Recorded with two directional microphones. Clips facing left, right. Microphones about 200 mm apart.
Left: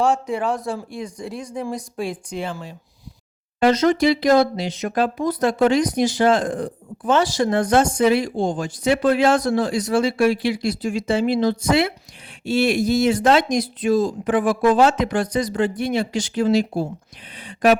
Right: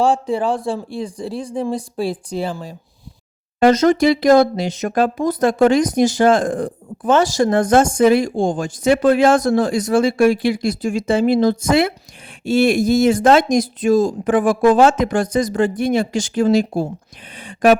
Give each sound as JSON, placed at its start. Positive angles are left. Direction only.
{"t": 0.0, "sound": "a man's voice", "side_deg": -30}